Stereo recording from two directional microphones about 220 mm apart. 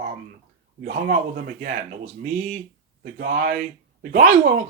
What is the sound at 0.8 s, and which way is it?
Speech, 40° right (ahead or behind).